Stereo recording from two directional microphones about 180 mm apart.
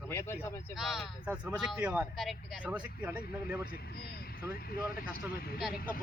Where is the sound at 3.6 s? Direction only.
60° left (ahead or behind).